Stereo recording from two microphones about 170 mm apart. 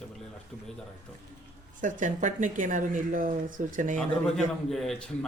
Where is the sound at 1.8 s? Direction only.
50° right (ahead or behind).